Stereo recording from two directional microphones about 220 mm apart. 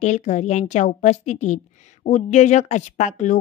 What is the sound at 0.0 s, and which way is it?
A woman's voice, 30° left (ahead or behind).